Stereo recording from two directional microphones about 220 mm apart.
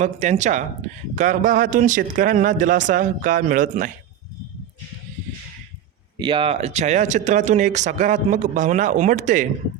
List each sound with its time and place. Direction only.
0.0 s speech: 30° right (ahead or behind)
6.1 s speech: 20° right (ahead or behind)